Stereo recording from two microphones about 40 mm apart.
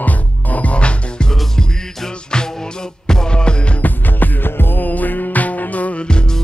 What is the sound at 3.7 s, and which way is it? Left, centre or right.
Music, left.